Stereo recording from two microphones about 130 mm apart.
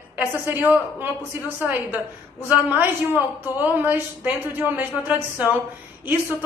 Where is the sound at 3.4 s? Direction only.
15° right (ahead or behind).